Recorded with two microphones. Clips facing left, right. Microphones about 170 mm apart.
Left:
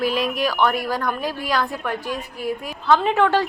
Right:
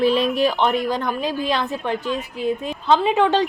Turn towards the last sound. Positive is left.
turn(degrees=-15)  # may be behind; listen again after turning